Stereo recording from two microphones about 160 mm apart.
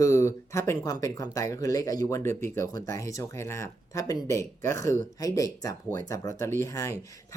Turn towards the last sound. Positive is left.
turn(degrees=20)  # may be behind; listen again after turning